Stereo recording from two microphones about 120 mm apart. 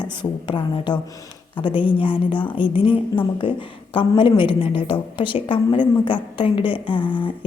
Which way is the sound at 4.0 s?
45° left (ahead or behind).